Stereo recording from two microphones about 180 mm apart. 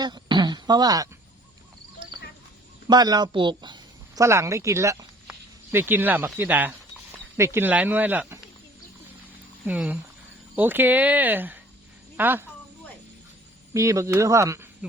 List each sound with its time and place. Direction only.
0.0 s a sound: 25° right (ahead or behind)
2.8 s speech: 20° right (ahead or behind)
9.6 s a woman's voice: 5° right (ahead or behind)
13.7 s speech: 15° right (ahead or behind)